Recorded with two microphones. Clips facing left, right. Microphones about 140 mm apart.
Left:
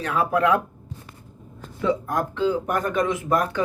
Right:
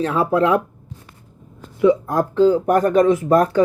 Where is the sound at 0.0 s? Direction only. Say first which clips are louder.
Right 4 dB; 30° right (ahead or behind).